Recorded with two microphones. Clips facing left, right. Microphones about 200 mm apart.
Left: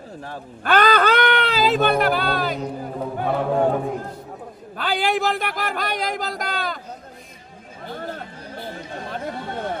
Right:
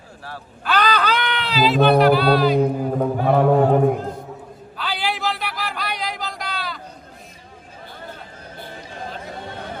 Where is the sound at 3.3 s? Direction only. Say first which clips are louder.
Right 4 dB; 55° right (ahead or behind).